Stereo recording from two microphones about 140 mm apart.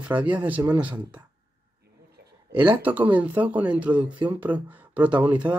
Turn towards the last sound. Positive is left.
turn(degrees=-10)  # may be behind; listen again after turning